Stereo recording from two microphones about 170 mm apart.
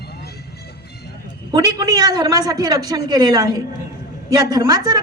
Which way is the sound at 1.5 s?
20° right (ahead or behind).